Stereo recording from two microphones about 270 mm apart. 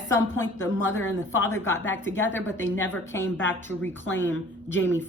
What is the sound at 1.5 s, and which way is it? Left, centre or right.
Speech, centre.